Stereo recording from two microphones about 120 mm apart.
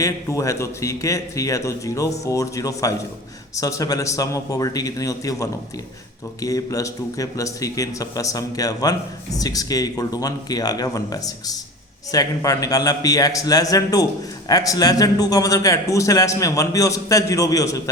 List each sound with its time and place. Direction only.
0.0 s a man's voice: 25° left (ahead or behind)